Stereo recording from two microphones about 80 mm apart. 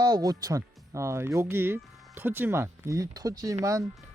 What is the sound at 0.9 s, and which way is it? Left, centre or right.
Speech, right.